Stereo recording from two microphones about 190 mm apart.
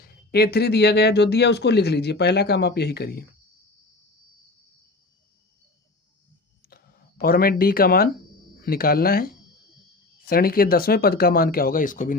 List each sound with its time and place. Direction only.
0.3 s speech: 55° left (ahead or behind)
6.7 s speech: 55° left (ahead or behind)